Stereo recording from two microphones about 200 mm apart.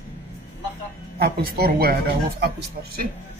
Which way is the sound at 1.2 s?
50° right (ahead or behind).